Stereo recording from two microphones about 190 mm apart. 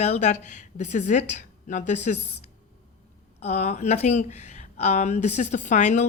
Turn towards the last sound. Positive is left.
turn(degrees=40)  # may be behind; listen again after turning